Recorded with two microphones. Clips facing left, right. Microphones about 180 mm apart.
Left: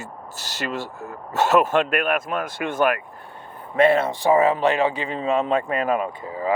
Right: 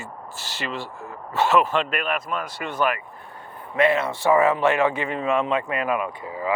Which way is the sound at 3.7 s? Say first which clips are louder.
Left 3 dB; 30° left (ahead or behind).